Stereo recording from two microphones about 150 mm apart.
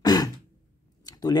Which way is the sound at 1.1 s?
25° left (ahead or behind).